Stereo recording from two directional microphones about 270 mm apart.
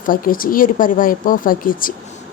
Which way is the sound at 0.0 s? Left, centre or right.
Left.